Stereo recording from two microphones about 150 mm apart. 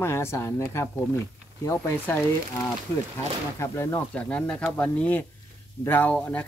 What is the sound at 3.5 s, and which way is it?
Speech, 20° left (ahead or behind).